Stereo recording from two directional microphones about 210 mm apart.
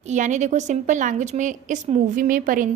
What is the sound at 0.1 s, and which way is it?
A woman's voice, 35° right (ahead or behind).